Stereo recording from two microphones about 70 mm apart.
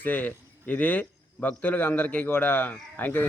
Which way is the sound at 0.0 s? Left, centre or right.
Left.